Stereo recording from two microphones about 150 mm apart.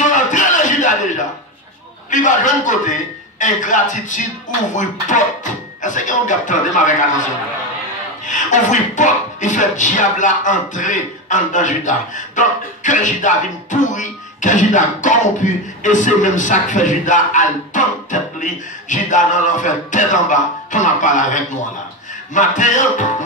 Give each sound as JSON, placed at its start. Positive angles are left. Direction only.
{"t": 0.0, "sound": "a sound", "side_deg": 55}
{"t": 2.0, "sound": "speech", "side_deg": 55}
{"t": 8.3, "sound": "speech", "side_deg": 55}